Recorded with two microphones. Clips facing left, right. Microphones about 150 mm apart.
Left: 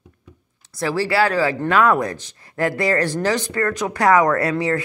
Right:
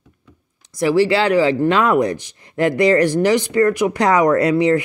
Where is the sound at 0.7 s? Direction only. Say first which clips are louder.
Right 4 dB; 15° right (ahead or behind).